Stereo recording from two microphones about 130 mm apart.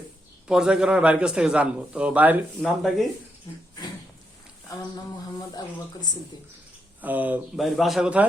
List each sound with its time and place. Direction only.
0.4 s a man's voice: 5° right (ahead or behind)
2.6 s a man's voice: centre (ahead or behind)
3.5 s speech: 30° left (ahead or behind)
7.0 s a man's voice: 15° right (ahead or behind)
7.5 s a man's voice: centre (ahead or behind)